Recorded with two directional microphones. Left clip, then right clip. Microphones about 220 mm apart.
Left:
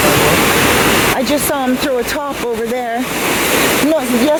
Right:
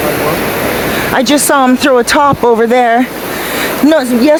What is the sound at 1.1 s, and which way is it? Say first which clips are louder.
Speech: right 7 dB; 30° right (ahead or behind).